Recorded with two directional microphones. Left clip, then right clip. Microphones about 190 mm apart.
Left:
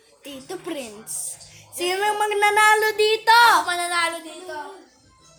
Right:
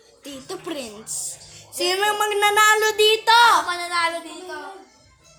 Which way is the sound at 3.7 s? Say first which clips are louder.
Even; 35° left (ahead or behind).